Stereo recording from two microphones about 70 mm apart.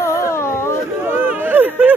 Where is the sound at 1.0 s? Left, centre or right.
Right.